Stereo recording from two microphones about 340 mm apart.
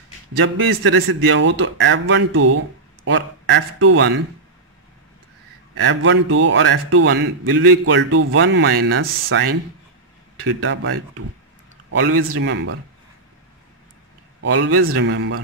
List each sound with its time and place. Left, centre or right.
0.4 s a man's voice: right
5.9 s a man's voice: right
10.4 s a man's voice: right
14.4 s a man's voice: right